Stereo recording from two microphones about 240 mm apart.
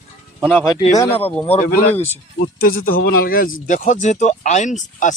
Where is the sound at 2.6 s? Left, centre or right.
Left.